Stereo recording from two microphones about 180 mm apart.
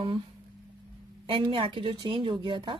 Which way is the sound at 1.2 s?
30° right (ahead or behind).